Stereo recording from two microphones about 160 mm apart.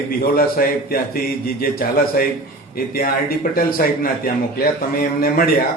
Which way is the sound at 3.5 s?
70° left (ahead or behind).